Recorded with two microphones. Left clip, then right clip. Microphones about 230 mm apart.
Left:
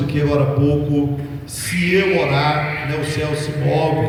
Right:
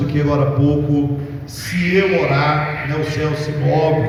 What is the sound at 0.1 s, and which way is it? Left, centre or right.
Speech, left.